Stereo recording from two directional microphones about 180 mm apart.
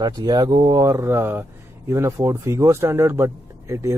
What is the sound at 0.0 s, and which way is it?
A man's voice, 25° right (ahead or behind).